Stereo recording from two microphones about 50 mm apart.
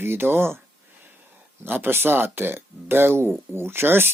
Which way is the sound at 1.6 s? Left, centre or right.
Right.